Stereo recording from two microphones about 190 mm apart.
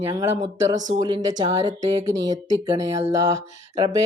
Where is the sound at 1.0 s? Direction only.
20° right (ahead or behind).